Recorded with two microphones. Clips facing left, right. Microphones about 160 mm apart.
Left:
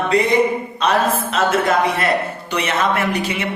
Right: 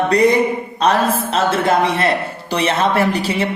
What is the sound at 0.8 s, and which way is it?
A man's voice, 35° right (ahead or behind).